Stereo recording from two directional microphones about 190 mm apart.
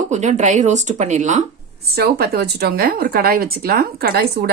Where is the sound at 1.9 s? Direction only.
55° right (ahead or behind).